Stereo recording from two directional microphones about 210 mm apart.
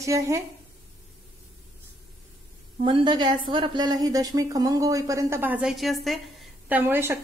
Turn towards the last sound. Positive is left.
turn(degrees=-10)  # may be behind; listen again after turning